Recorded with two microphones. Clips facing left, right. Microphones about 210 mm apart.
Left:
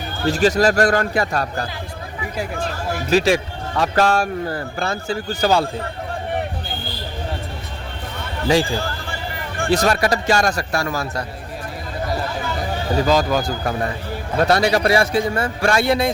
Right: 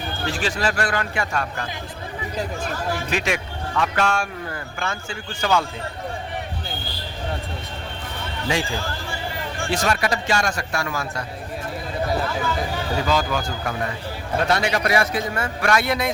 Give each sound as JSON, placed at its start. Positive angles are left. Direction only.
{"t": 0.3, "sound": "speech", "side_deg": 40}
{"t": 3.1, "sound": "speech", "side_deg": 35}
{"t": 8.5, "sound": "speech", "side_deg": 35}
{"t": 13.1, "sound": "speech", "side_deg": 40}